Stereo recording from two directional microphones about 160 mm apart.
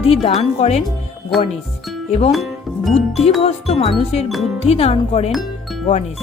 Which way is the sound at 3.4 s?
40° left (ahead or behind).